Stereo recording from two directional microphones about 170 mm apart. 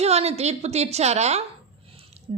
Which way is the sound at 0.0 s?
40° right (ahead or behind).